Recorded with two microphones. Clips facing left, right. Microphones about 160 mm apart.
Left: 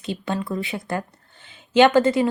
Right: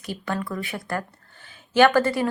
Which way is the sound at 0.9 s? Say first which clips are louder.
Left 2 dB; 20° left (ahead or behind).